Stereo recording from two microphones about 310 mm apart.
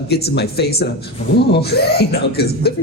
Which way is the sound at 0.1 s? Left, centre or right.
Left.